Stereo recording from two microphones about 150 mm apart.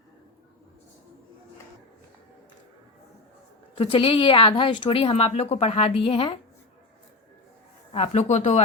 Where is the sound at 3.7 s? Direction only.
35° left (ahead or behind).